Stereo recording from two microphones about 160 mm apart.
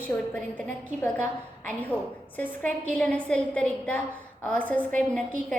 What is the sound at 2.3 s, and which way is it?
A woman's voice, 10° left (ahead or behind).